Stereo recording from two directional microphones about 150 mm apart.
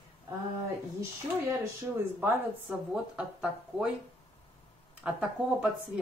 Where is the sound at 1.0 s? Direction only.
20° right (ahead or behind).